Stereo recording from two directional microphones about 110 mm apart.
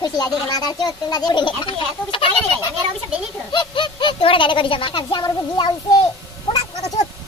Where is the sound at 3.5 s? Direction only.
45° left (ahead or behind).